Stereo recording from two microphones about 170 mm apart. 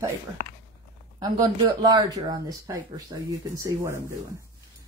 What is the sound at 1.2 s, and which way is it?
Speech, 25° right (ahead or behind).